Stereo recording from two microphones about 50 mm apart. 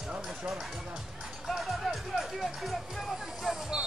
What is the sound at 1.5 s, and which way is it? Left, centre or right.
Music, centre.